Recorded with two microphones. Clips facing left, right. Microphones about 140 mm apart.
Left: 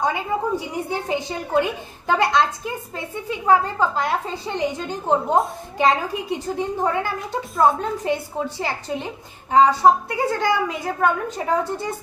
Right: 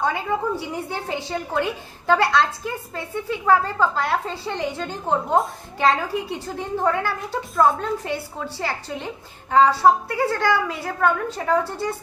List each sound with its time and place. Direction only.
0.0 s a woman's voice: 15° left (ahead or behind)